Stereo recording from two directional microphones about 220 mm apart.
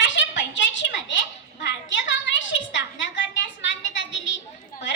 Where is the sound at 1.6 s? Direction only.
55° left (ahead or behind).